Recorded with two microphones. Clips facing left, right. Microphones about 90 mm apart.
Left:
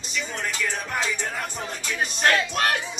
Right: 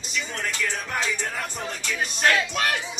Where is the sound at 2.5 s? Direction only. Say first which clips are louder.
Left 2 dB; 45° left (ahead or behind).